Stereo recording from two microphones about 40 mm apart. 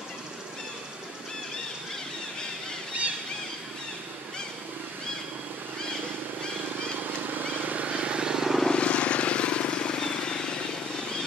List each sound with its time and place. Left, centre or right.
7.0 s vehicle: right; by 8.5 s centre
8.7 s vehicle: left